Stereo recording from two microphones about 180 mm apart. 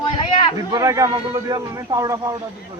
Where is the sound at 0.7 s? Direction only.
20° right (ahead or behind).